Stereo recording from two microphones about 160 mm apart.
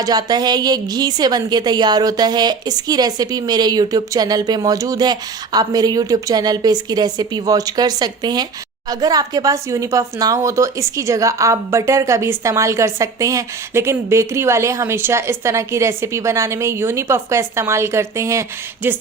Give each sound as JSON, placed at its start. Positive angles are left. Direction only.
{"t": 0.0, "sound": "speech", "side_deg": -25}